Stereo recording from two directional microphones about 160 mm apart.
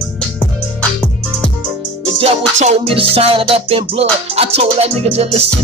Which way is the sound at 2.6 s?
35° right (ahead or behind).